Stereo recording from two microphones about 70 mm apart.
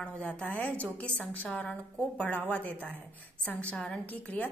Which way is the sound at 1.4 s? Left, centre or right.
Centre.